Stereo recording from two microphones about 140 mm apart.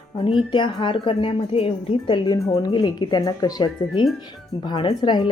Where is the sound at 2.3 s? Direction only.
25° left (ahead or behind).